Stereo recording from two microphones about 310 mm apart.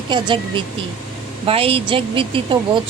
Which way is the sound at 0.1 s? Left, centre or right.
Centre.